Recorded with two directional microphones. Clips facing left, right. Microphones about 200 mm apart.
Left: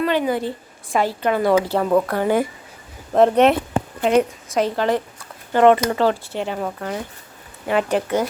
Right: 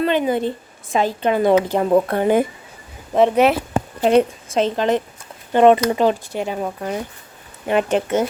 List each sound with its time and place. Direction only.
0.0 s speech: 20° right (ahead or behind)
3.1 s speech: centre (ahead or behind)
4.0 s speech: 30° right (ahead or behind)